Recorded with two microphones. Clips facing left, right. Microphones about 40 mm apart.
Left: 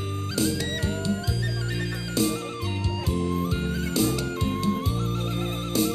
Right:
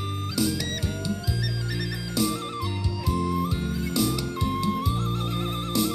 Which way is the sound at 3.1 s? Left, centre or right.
Left.